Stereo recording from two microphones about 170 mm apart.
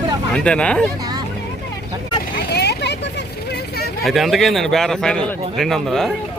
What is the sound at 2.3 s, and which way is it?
Vehicle, 75° left (ahead or behind).